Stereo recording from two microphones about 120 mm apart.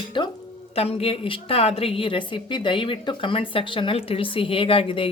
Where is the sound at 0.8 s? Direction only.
55° left (ahead or behind).